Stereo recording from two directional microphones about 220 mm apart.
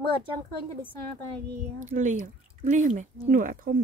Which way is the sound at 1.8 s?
35° right (ahead or behind).